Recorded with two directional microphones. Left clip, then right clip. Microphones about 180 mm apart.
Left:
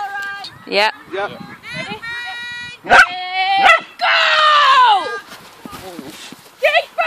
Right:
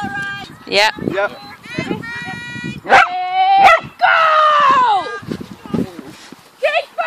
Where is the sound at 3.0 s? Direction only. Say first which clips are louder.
Right 2 dB; 20° left (ahead or behind).